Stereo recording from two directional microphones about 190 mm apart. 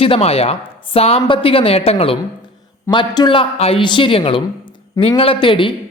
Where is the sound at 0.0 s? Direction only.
30° left (ahead or behind).